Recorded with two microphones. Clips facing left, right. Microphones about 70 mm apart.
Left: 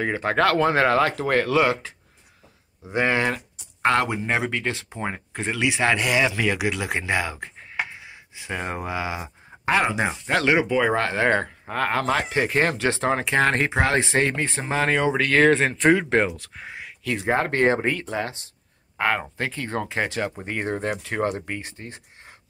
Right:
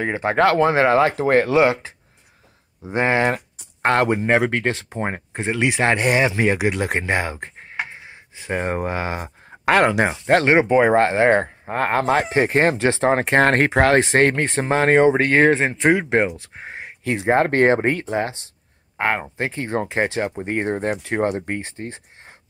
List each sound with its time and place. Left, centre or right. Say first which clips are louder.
0.0 s speech: right 3 dB; right
2.8 s speech: right 3 dB; right
9.7 s speech: right 5 dB; right
13.1 s speech: right 5 dB; right; by 16.3 s centre
16.3 s speech: right 3 dB; right